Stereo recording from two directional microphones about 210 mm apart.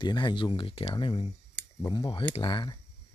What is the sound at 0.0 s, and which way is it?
Speech, 20° left (ahead or behind).